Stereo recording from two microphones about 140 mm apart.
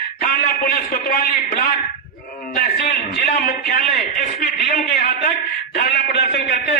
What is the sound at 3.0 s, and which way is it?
Speech, 90° left.